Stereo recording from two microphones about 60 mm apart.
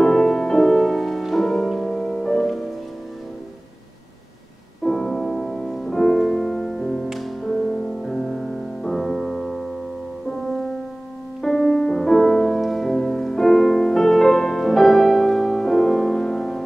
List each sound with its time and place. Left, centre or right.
0.0 s music: centre
4.8 s music: centre